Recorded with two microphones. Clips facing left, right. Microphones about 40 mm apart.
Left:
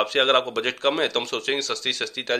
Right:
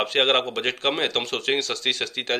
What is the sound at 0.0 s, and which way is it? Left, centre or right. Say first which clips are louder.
Speech: left 1 dB; right.